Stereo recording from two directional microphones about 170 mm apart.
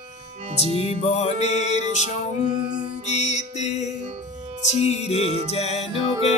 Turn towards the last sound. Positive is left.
turn(degrees=40)  # may be behind; listen again after turning